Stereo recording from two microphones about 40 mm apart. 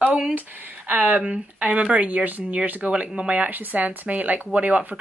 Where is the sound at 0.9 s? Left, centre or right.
Right.